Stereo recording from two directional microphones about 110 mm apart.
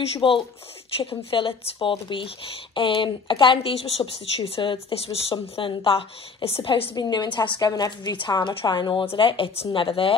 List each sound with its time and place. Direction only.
0.0 s speech: 55° left (ahead or behind)
7.0 s speech: 40° left (ahead or behind)